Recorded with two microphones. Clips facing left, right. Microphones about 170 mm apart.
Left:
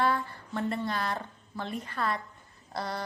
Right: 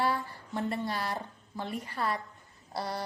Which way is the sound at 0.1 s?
20° right (ahead or behind).